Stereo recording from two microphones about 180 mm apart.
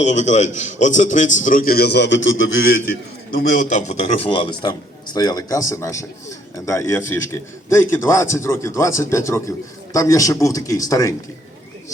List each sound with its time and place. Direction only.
0.0 s a man's voice: 40° left (ahead or behind); by 2.6 s 90° left
3.3 s a man's voice: 50° left (ahead or behind); by 11.1 s 20° left (ahead or behind)